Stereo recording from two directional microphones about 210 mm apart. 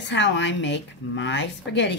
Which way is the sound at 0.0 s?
60° left (ahead or behind).